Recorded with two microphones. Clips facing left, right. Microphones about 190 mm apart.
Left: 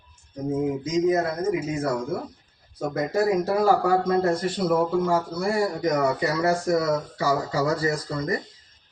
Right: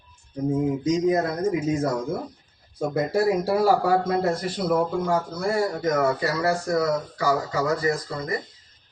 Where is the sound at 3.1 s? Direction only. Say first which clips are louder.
Left 1 dB; 5° right (ahead or behind); by 8.3 s 35° left (ahead or behind).